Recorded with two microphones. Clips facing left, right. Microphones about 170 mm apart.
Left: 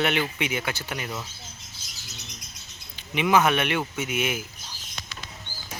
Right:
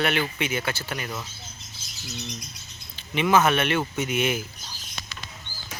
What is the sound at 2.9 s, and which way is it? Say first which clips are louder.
Speech: right 1 dB; 15° left (ahead or behind).